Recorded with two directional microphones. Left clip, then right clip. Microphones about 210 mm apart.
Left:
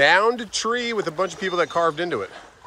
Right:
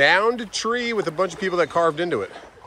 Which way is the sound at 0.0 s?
15° left (ahead or behind).